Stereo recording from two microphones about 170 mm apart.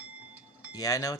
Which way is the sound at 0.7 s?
20° left (ahead or behind).